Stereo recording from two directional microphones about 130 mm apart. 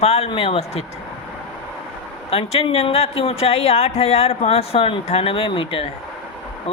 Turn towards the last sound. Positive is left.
turn(degrees=45)  # may be behind; listen again after turning